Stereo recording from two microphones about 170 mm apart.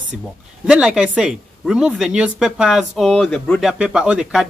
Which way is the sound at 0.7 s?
5° right (ahead or behind).